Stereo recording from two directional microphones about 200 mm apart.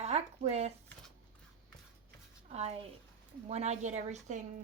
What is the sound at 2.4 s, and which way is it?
A woman's voice, 35° right (ahead or behind).